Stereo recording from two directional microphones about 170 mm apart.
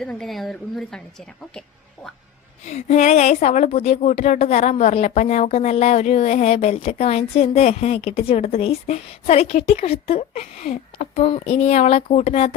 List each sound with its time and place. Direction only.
0.0 s a woman's voice: 5° left (ahead or behind)
2.6 s speech: 45° left (ahead or behind)